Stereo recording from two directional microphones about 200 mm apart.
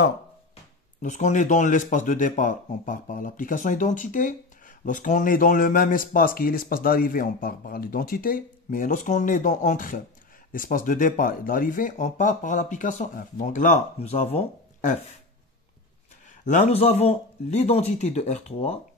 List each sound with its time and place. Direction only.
1.0 s speech: 35° left (ahead or behind)
16.4 s speech: 35° left (ahead or behind)